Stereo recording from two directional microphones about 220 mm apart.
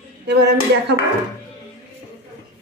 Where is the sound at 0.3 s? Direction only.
50° right (ahead or behind).